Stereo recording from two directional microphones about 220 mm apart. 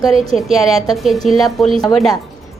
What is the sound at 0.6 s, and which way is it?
Speech, 15° left (ahead or behind).